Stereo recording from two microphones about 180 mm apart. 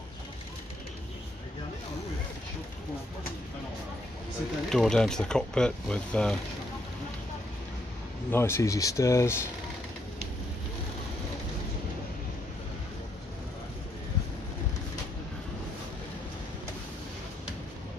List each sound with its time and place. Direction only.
4.6 s speech: 5° left (ahead or behind)
8.3 s speech: 15° left (ahead or behind)